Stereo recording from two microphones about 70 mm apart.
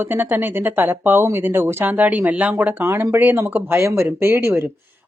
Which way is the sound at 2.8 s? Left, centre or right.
Right.